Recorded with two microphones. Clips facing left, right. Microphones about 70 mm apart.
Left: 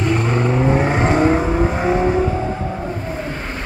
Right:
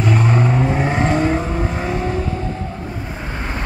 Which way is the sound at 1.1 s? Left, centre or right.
Left.